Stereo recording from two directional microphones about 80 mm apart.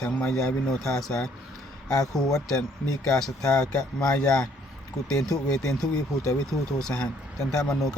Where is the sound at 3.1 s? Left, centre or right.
Centre.